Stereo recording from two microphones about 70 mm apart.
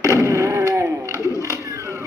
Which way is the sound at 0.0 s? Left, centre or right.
Right.